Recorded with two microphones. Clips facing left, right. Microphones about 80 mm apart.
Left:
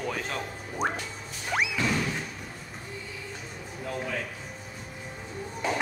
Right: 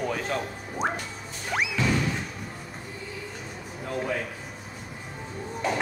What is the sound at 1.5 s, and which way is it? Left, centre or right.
Music, centre.